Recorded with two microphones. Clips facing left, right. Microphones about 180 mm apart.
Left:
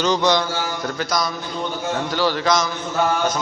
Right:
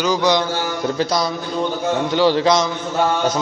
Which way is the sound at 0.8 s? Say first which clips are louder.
Right 6 dB; 30° right (ahead or behind).